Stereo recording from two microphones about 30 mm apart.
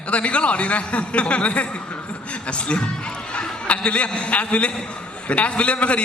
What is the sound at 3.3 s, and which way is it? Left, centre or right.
A man's voice, left.